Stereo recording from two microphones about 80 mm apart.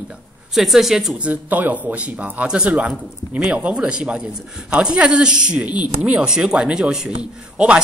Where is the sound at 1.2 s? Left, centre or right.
Centre.